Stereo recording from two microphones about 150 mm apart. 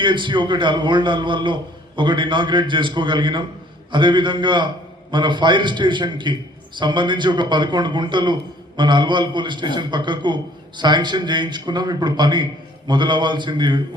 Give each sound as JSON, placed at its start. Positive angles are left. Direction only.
{"t": 0.0, "sound": "a man's voice", "side_deg": -30}